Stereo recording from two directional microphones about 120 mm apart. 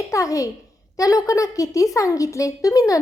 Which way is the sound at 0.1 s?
25° left (ahead or behind).